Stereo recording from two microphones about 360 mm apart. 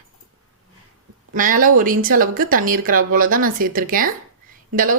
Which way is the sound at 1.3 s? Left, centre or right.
Right.